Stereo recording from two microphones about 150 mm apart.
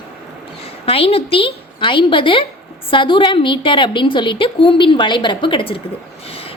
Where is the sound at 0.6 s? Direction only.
40° left (ahead or behind).